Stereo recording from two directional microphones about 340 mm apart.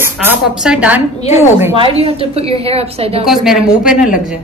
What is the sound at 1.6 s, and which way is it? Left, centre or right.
Speech, centre.